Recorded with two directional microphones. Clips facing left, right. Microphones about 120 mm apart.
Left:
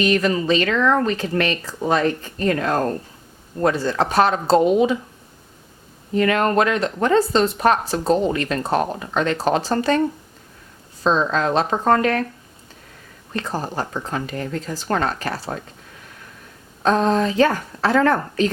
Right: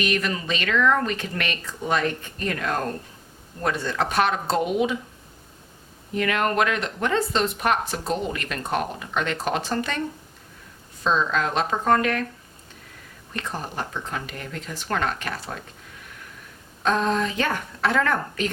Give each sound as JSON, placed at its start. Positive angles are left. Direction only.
{"t": 0.0, "sound": "speech", "side_deg": 35}
{"t": 6.1, "sound": "speech", "side_deg": 35}
{"t": 11.0, "sound": "speech", "side_deg": 35}
{"t": 13.3, "sound": "speech", "side_deg": 35}
{"t": 16.8, "sound": "speech", "side_deg": 35}